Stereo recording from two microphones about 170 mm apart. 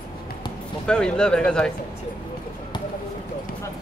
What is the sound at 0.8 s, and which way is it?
Speech, 5° left (ahead or behind).